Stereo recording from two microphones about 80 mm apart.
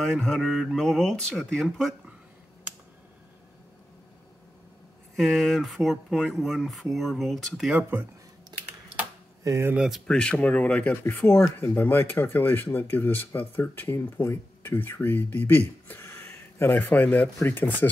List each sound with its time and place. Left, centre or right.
0.0 s speech: centre
5.1 s speech: centre
7.9 s speech: right
8.5 s typing: right
9.4 s speech: right
9.8 s speech: centre
10.0 s speech: centre